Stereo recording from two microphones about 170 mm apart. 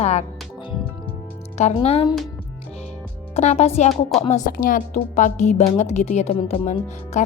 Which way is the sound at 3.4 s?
40° left (ahead or behind).